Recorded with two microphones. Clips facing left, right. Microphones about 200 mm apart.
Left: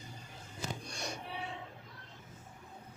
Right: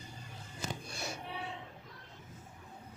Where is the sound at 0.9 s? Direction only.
5° right (ahead or behind).